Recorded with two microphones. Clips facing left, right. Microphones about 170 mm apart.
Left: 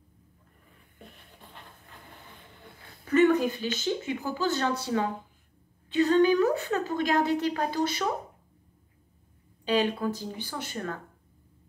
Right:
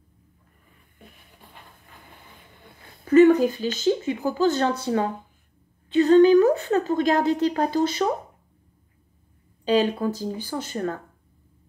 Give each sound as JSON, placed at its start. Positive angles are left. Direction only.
{"t": 0.9, "sound": "a sound", "side_deg": -5}
{"t": 3.1, "sound": "a woman's voice", "side_deg": -40}
{"t": 9.7, "sound": "speech", "side_deg": -40}